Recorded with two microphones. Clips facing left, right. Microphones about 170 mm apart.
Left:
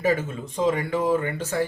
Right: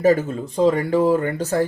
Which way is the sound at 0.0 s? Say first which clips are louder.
Right 7 dB; 40° right (ahead or behind).